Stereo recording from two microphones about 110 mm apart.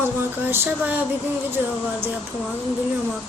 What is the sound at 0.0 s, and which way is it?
Speech, 15° right (ahead or behind).